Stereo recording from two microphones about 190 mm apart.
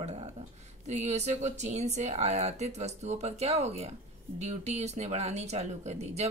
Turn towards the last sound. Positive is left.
turn(degrees=-35)  # may be behind; listen again after turning